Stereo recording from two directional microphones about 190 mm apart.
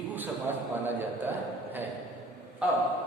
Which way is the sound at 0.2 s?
10° right (ahead or behind).